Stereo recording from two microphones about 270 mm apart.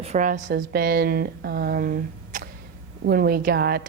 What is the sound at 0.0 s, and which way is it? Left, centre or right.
A woman's voice, right.